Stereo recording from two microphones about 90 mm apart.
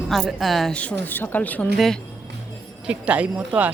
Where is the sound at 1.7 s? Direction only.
Centre (ahead or behind).